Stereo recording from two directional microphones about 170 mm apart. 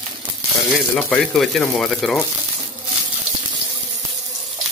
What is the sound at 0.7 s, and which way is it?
Speech, 5° left (ahead or behind).